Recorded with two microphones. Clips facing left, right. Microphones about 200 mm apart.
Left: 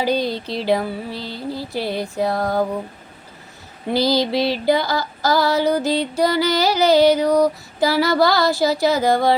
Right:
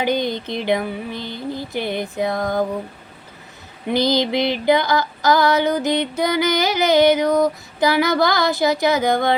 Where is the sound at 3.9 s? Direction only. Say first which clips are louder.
Even; 20° right (ahead or behind).